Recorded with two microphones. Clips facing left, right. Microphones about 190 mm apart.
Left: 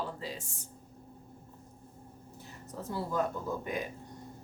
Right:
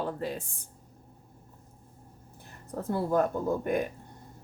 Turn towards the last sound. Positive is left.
turn(degrees=-55)  # may be behind; listen again after turning